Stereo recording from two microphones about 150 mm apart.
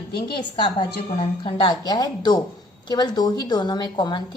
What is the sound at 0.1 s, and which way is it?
Speech, 90° left.